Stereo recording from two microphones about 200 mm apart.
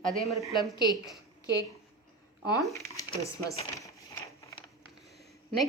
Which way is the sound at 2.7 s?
15° left (ahead or behind).